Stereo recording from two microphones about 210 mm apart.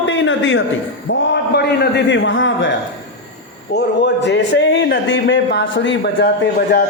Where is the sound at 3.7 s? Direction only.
55° left (ahead or behind).